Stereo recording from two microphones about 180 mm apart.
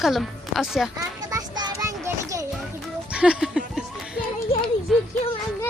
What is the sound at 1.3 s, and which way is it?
Child singing, 20° right (ahead or behind).